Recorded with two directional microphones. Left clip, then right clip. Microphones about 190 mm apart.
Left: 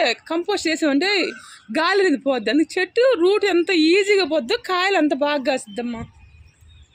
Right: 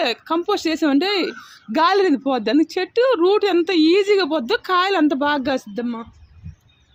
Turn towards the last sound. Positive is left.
turn(degrees=-55)  # may be behind; listen again after turning